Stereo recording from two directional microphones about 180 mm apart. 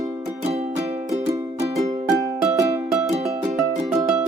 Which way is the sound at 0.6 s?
35° right (ahead or behind).